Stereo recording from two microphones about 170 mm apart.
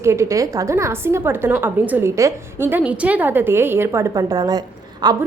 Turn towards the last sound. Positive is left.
turn(degrees=-25)  # may be behind; listen again after turning